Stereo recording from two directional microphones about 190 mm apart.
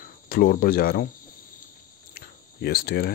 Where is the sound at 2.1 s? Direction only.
55° left (ahead or behind).